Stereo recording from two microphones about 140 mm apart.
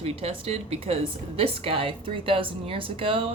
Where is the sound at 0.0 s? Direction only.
45° right (ahead or behind).